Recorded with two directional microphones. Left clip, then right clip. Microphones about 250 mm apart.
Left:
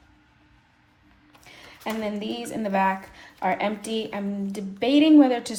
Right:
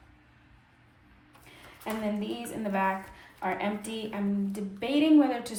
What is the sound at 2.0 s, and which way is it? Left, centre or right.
A woman's voice, left.